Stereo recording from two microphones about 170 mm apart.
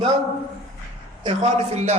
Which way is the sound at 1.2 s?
35° right (ahead or behind).